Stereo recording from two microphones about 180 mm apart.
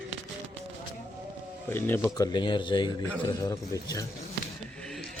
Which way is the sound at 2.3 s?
25° left (ahead or behind).